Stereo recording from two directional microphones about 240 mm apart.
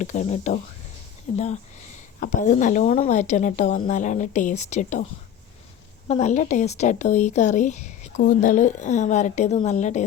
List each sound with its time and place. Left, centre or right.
0.0 s a woman's voice: left
6.1 s speech: left